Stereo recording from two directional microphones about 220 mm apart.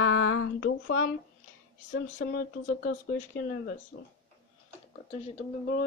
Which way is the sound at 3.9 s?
60° left (ahead or behind).